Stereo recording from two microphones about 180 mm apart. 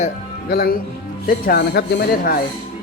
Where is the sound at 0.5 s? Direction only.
60° left (ahead or behind).